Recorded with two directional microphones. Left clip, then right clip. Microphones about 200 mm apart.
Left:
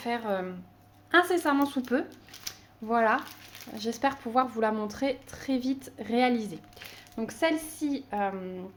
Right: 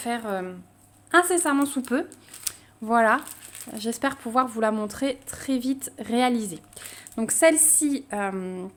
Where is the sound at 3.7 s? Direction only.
25° right (ahead or behind); by 8.7 s 45° right (ahead or behind).